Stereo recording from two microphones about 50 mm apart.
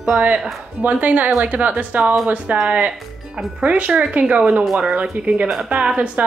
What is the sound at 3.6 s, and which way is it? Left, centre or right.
Speech, right.